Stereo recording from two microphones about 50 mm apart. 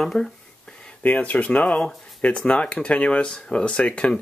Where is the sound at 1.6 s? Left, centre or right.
Centre.